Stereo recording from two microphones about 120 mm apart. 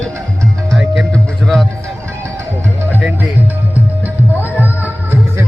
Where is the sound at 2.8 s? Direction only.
15° right (ahead or behind).